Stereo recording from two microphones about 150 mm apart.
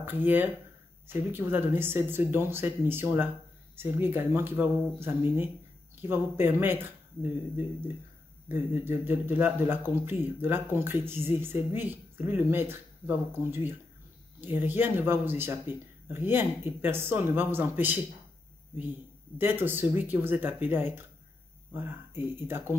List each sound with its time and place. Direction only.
0.0 s a man's voice: 15° right (ahead or behind)
19.3 s a man's voice: 15° right (ahead or behind)